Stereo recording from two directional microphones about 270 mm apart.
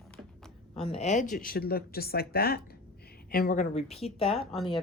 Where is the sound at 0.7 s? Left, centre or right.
Left.